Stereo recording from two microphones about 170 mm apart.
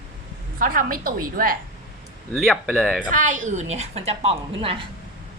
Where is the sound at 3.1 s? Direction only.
50° right (ahead or behind).